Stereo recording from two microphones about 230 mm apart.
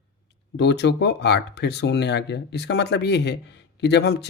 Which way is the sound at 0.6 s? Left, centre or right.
Left.